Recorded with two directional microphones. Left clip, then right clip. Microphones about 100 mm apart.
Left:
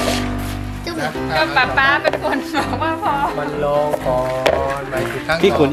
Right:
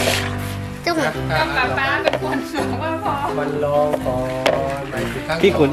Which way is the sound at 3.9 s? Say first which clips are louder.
Left 3 dB; 15° left (ahead or behind).